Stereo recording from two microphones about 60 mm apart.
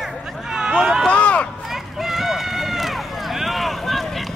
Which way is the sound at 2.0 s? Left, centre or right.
Centre.